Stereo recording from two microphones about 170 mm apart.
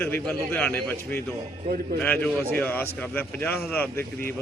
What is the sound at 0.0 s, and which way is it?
Speech, 10° left (ahead or behind).